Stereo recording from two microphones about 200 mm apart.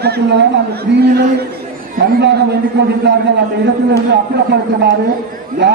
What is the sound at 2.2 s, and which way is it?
A man's voice, 55° right (ahead or behind).